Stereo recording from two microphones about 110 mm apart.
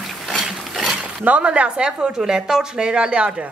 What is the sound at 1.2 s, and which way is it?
Speech, 10° right (ahead or behind).